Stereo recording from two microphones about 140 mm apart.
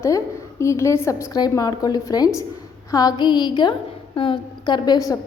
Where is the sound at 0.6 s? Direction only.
20° left (ahead or behind).